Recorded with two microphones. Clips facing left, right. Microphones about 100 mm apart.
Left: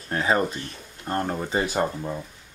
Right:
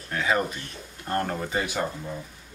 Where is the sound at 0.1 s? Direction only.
35° left (ahead or behind).